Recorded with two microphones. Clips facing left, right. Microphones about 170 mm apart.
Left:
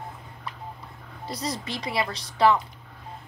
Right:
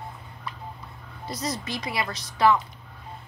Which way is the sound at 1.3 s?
30° left (ahead or behind).